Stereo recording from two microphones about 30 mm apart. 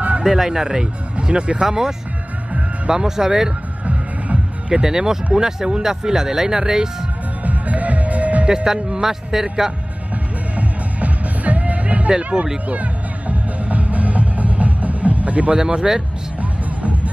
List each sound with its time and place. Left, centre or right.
0.2 s speech: centre
1.2 s speech: right
1.7 s speech: centre
3.8 s music: right
4.8 s speech: centre
7.4 s music: right
8.5 s speech: right
10.1 s music: right
12.2 s speech: right
12.6 s music: right
15.5 s speech: right
16.3 s music: right